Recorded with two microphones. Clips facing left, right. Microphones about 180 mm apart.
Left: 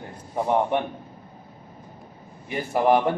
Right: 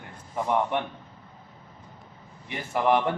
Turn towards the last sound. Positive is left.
turn(degrees=40)  # may be behind; listen again after turning